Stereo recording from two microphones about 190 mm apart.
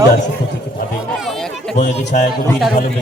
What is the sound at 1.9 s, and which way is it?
Speech, 40° left (ahead or behind).